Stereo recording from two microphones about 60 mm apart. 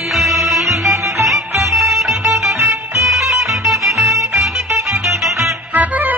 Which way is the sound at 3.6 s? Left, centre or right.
Centre.